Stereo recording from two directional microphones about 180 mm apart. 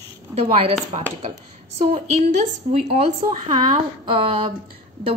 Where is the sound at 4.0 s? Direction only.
30° right (ahead or behind).